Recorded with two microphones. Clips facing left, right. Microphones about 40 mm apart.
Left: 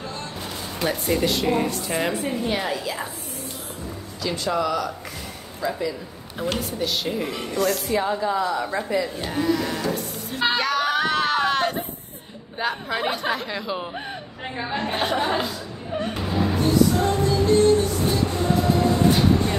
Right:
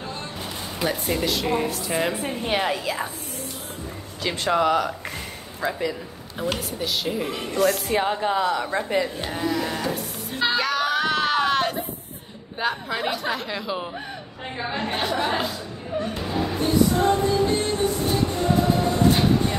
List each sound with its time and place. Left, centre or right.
0.7 s speech: centre
2.1 s a woman's voice: right
4.2 s speech: right
6.5 s speech: centre
7.9 s a woman's voice: right
9.3 s speech: centre
10.5 s music: centre
12.5 s speech: centre
15.2 s speech: centre
16.2 s music: centre
16.6 s music: centre
17.9 s music: centre